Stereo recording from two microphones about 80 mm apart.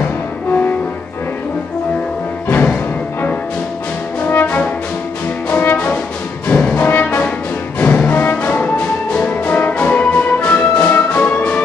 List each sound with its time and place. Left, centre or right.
2.4 s music: left
4.3 s brass instrument: left
6.4 s music: centre